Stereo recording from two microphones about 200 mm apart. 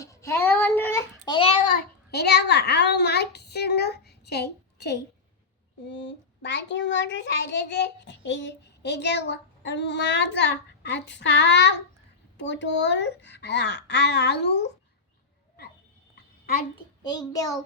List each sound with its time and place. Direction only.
0.0 s child singing: 15° left (ahead or behind)
1.7 s a child's voice: 55° left (ahead or behind)
17.0 s a child's voice: 20° left (ahead or behind)